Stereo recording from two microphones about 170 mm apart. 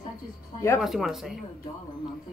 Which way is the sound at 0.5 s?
15° left (ahead or behind).